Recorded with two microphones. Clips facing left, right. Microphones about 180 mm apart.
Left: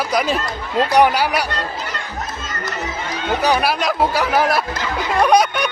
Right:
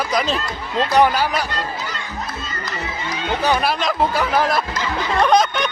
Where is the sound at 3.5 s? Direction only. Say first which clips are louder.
Left 1 dB; 5° left (ahead or behind).